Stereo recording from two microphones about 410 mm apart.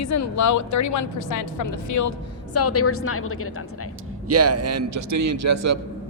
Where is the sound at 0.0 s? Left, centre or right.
Left.